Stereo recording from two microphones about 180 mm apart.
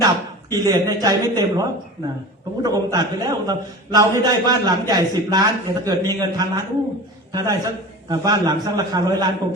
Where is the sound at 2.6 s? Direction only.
20° right (ahead or behind).